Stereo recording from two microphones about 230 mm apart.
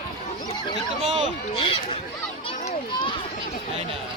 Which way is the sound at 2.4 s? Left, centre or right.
Left.